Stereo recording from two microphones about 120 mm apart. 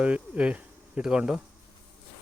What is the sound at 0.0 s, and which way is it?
Speech, 10° right (ahead or behind).